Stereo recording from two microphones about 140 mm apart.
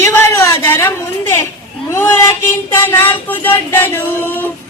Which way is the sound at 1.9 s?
20° left (ahead or behind).